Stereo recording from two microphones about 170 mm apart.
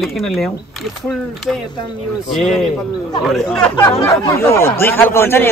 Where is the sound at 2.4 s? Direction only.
Centre (ahead or behind).